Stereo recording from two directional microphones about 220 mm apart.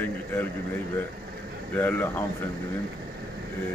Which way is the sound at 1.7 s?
10° left (ahead or behind).